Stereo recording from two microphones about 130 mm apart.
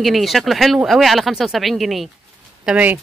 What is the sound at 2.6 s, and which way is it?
Speech, 10° right (ahead or behind).